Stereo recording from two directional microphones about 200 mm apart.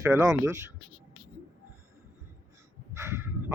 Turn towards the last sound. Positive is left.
turn(degrees=-10)  # may be behind; listen again after turning